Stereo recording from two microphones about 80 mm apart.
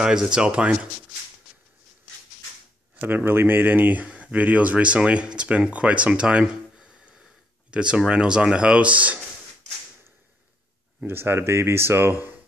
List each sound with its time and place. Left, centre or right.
0.0 s speech: centre
3.0 s speech: right
11.1 s speech: right